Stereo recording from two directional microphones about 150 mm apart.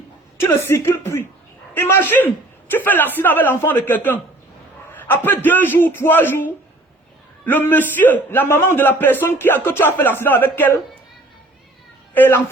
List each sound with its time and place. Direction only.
0.3 s a man's voice: 15° left (ahead or behind)
12.1 s a child's voice: 15° left (ahead or behind)